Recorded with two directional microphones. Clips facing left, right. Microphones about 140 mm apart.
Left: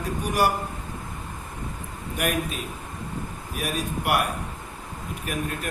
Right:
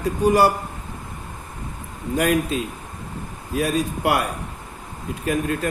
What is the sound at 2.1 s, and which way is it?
Speech, 90° right.